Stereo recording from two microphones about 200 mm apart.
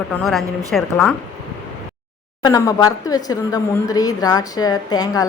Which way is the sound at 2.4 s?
15° left (ahead or behind).